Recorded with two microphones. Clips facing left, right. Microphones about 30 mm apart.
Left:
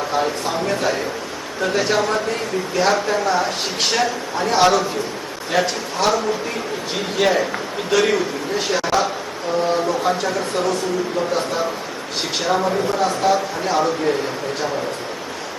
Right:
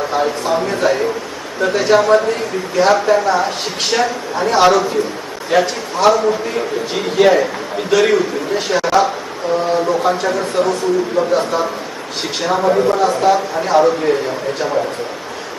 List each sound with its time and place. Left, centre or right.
0.1 s a man's voice: centre
12.6 s a man's voice: right
13.0 s a man's voice: centre